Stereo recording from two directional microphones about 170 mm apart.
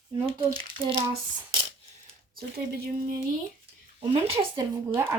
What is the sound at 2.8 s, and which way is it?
Speech, 55° right (ahead or behind).